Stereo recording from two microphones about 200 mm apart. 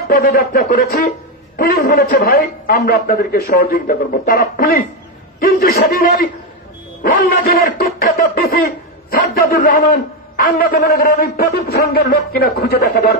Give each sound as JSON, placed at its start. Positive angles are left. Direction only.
{"t": 0.1, "sound": "speech", "side_deg": 50}